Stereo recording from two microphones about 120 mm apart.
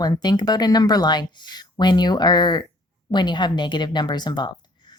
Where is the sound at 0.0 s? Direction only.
35° left (ahead or behind).